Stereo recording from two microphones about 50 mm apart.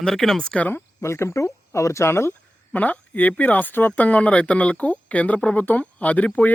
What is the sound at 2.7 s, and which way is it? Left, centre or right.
Speech, left.